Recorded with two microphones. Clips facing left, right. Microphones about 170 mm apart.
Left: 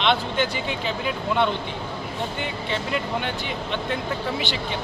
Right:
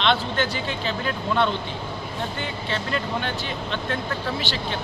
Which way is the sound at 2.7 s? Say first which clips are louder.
Even; 15° left (ahead or behind).